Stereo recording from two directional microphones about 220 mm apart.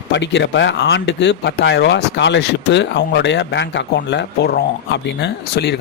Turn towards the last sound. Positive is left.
turn(degrees=50)  # may be behind; listen again after turning